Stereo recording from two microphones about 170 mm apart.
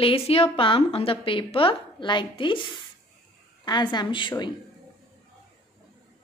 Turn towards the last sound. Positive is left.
turn(degrees=25)  # may be behind; listen again after turning